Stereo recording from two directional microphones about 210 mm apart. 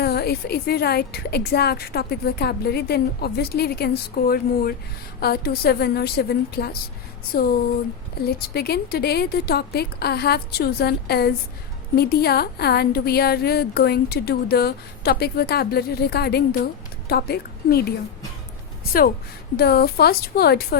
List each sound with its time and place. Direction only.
0.0 s a woman's voice: 50° left (ahead or behind)